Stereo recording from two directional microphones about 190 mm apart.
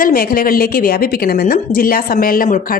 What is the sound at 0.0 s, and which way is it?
A woman's voice, 50° left (ahead or behind).